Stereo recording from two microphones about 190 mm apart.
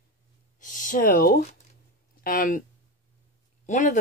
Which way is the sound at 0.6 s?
40° left (ahead or behind).